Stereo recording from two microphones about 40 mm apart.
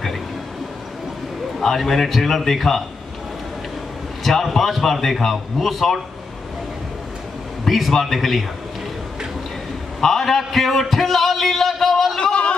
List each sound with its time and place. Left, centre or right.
1.6 s a man's voice: centre
4.2 s a man's voice: centre
7.6 s a man's voice: centre
9.9 s a man's voice: centre
12.2 s a sound: left